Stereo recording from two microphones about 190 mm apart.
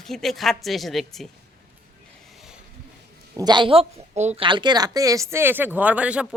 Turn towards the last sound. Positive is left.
turn(degrees=-5)  # may be behind; listen again after turning